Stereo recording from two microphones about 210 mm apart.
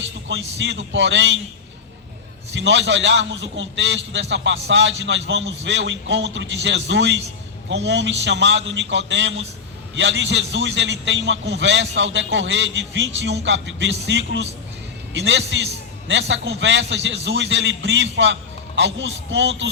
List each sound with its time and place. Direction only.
0.3 s a man's voice: 60° right (ahead or behind)
2.5 s a man's voice: 60° right (ahead or behind)